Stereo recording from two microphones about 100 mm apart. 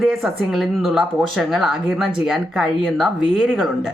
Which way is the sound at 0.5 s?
Centre (ahead or behind).